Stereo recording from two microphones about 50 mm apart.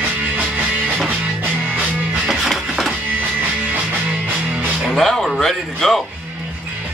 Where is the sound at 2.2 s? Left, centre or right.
Centre.